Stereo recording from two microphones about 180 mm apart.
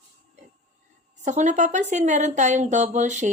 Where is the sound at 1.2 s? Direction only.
40° right (ahead or behind).